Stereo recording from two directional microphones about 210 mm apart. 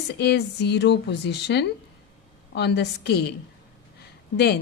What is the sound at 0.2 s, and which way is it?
A woman's voice, 55° left (ahead or behind).